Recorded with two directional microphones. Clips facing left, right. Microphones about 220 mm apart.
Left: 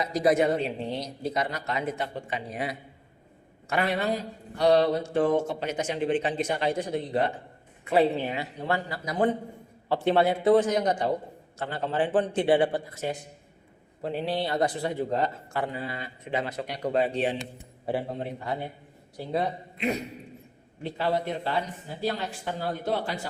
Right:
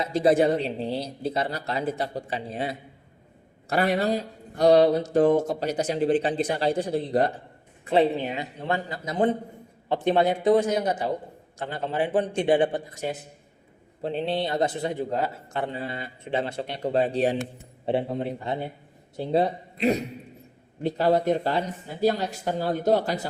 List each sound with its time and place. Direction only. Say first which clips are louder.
0.0 s a man's voice: right 3 dB; 25° right (ahead or behind)
8.2 s a man's voice: right 1 dB; 20° right (ahead or behind)
15.1 s a man's voice: even; 10° right (ahead or behind)
15.5 s a man's voice: right 1 dB; 25° right (ahead or behind)
17.8 s a man's voice: right 4 dB; 25° right (ahead or behind); by 23.2 s 40° right (ahead or behind)